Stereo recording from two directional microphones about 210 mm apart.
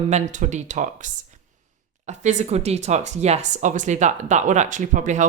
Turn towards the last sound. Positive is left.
turn(degrees=-35)  # may be behind; listen again after turning